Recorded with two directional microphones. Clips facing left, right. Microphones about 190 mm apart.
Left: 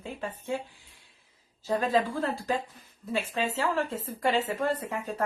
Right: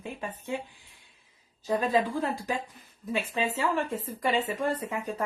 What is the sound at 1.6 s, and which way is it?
Speech, 15° right (ahead or behind).